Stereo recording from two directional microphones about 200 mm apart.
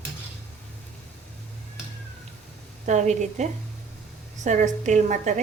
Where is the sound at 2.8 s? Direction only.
35° right (ahead or behind).